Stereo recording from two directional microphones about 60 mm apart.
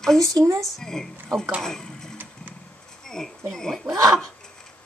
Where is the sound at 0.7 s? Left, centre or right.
Centre.